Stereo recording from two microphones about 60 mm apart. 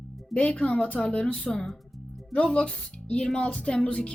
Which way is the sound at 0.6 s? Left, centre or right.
Left.